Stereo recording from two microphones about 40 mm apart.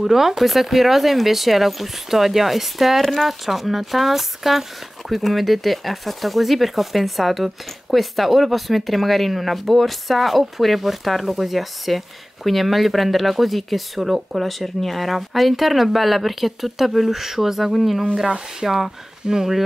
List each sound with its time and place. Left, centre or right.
0.0 s speech: centre